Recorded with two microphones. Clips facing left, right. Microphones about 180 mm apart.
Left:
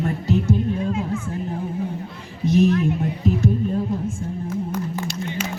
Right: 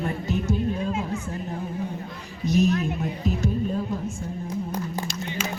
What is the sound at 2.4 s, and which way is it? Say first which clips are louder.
Music: left 4 dB; 25° left (ahead or behind).